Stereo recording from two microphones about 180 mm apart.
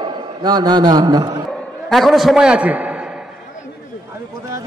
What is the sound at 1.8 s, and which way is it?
A man's voice, centre (ahead or behind).